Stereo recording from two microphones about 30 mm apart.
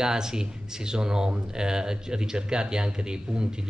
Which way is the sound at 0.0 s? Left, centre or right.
Right.